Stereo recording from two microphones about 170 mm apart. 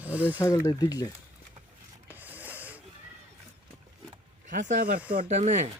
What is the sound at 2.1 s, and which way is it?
Snort, 10° right (ahead or behind).